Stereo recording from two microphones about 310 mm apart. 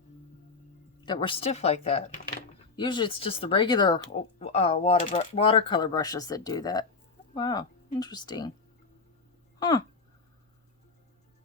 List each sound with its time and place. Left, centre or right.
1.0 s speech: centre
9.6 s speech: centre